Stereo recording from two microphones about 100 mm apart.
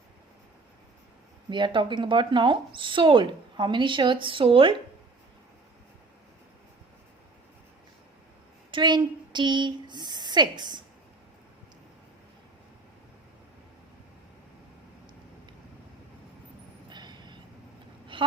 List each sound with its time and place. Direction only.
1.5 s speech: 50° right (ahead or behind)
8.7 s speech: 50° right (ahead or behind)
16.9 s vehicle: 45° right (ahead or behind)
18.1 s a sound: 60° right (ahead or behind)